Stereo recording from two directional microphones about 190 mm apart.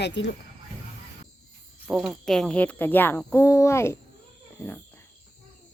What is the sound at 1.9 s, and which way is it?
Speech, 5° right (ahead or behind).